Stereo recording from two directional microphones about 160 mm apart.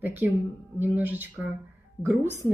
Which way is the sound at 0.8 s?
10° right (ahead or behind).